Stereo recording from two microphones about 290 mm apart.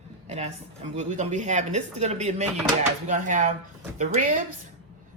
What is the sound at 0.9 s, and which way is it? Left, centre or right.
Speech, right.